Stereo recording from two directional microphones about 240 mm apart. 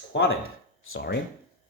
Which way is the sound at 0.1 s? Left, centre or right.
Left.